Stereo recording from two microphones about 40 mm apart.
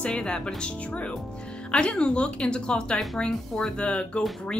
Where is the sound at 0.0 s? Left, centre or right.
Left.